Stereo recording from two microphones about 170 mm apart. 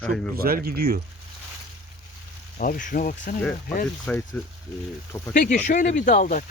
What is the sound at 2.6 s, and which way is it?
Speech, 55° left (ahead or behind).